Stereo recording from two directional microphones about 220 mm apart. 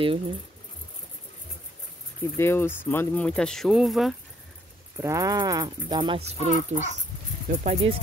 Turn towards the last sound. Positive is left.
turn(degrees=-30)  # may be behind; listen again after turning